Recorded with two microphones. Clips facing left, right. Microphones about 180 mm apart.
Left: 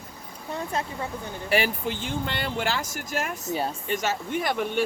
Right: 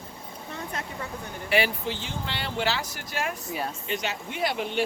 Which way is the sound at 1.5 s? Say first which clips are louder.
Left 1 dB; 45° left (ahead or behind).